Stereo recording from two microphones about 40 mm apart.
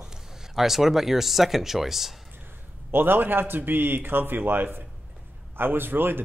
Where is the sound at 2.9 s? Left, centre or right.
Right.